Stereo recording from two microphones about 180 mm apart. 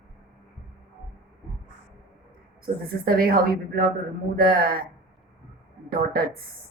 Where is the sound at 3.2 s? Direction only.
55° right (ahead or behind).